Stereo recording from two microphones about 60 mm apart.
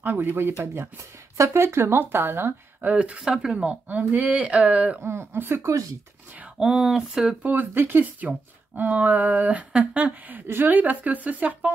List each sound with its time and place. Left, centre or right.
0.0 s speech: right
1.3 s speech: right; by 5.0 s centre
5.3 s speech: right
5.6 s speech: right
6.6 s speech: centre
7.4 s speech: right